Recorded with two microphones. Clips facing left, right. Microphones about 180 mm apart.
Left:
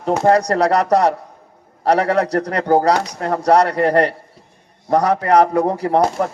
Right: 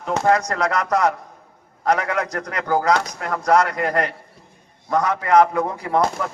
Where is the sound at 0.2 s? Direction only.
35° left (ahead or behind).